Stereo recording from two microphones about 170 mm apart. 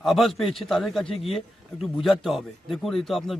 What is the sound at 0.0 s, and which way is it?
Speech, centre (ahead or behind).